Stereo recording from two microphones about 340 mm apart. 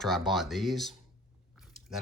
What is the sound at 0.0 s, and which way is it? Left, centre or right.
Speech, centre.